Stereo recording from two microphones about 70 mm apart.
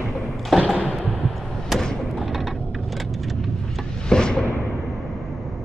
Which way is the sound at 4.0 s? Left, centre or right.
Centre.